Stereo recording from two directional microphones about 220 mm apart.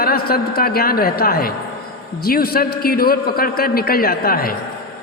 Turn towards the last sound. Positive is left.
turn(degrees=40)  # may be behind; listen again after turning